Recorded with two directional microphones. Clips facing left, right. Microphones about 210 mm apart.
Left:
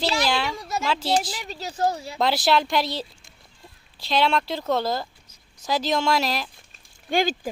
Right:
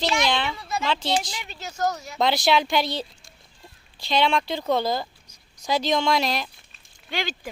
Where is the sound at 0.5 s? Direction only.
45° left (ahead or behind).